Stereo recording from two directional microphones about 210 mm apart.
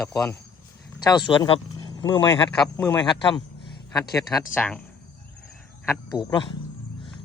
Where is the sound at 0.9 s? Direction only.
20° left (ahead or behind).